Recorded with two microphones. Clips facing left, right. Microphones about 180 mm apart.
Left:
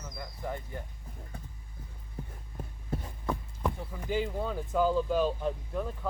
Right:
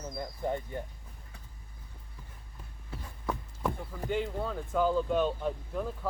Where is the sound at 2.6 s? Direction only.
50° left (ahead or behind).